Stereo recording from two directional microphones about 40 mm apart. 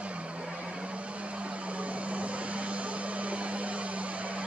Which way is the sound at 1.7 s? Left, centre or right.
Right.